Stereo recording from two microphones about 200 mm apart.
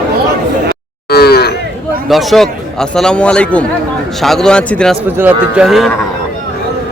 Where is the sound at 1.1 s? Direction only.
50° left (ahead or behind).